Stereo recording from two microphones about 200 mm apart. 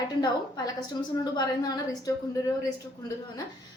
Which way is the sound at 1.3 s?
20° left (ahead or behind).